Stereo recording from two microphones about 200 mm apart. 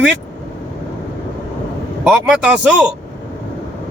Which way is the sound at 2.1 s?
5° right (ahead or behind).